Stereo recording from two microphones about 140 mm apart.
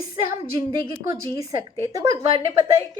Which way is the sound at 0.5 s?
35° right (ahead or behind).